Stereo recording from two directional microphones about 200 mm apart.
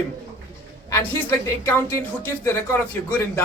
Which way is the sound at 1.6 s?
15° left (ahead or behind).